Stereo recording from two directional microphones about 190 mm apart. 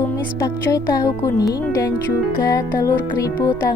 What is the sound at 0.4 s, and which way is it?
Speech, 15° left (ahead or behind).